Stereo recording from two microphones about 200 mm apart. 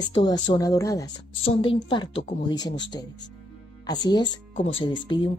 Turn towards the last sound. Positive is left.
turn(degrees=25)  # may be behind; listen again after turning